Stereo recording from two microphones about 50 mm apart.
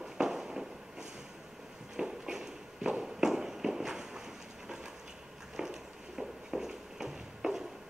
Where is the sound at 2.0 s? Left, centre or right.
Centre.